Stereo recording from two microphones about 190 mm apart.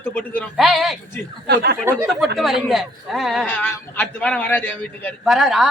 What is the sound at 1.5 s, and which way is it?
Speech, 60° right (ahead or behind).